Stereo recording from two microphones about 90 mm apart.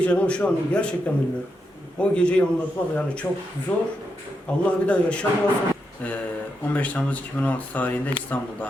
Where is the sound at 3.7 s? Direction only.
15° left (ahead or behind).